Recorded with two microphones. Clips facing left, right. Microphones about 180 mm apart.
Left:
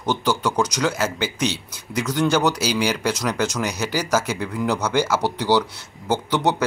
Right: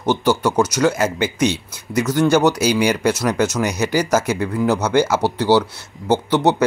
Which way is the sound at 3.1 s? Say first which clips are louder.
Right 5 dB; 10° right (ahead or behind).